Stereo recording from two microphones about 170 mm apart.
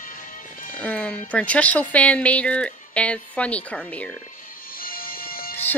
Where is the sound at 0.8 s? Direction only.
5° left (ahead or behind).